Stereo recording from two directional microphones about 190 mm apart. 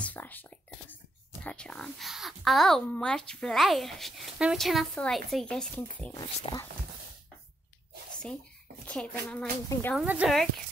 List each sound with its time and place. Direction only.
0.0 s a child's voice: 10° left (ahead or behind)
6.1 s speech: 20° left (ahead or behind)
8.8 s a child's voice: 5° left (ahead or behind)
9.9 s a child's voice: 5° right (ahead or behind)